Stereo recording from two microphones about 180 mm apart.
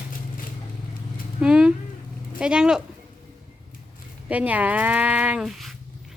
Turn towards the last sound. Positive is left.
turn(degrees=0)  # may be behind; listen again after turning